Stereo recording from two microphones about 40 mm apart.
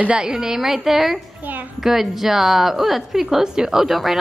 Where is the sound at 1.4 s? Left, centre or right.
Right.